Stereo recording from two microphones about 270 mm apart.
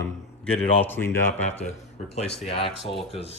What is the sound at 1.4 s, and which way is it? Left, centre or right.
Speech, left.